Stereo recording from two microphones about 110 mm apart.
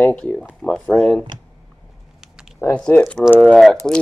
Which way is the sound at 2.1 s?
5° right (ahead or behind).